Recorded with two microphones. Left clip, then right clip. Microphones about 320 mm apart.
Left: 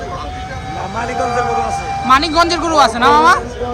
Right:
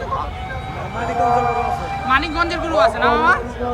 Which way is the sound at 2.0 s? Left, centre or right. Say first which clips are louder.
Left 7 dB; centre.